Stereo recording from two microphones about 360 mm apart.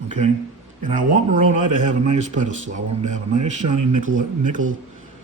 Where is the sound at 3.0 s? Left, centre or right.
Right.